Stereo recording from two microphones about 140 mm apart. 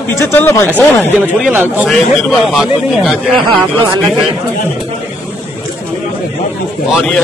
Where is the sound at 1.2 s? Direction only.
15° right (ahead or behind).